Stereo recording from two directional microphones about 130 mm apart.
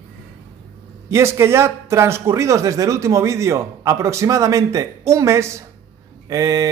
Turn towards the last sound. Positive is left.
turn(degrees=-25)  # may be behind; listen again after turning